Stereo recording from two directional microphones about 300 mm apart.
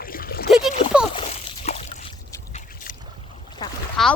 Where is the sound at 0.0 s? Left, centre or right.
Left.